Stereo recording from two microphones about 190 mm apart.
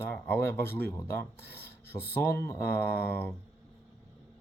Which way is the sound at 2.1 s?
10° left (ahead or behind).